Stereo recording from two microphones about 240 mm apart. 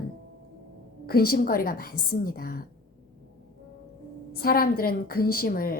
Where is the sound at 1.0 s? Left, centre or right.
Left.